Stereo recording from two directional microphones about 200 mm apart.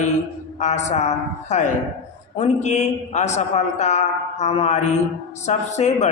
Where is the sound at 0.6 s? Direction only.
35° left (ahead or behind).